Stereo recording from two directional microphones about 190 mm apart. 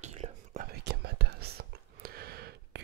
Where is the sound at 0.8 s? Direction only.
60° right (ahead or behind).